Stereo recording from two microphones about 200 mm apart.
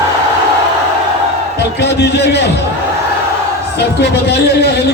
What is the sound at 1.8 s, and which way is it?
Speech, 55° left (ahead or behind).